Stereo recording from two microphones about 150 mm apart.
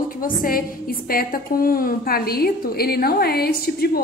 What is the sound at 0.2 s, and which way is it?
A woman's voice, 70° left (ahead or behind).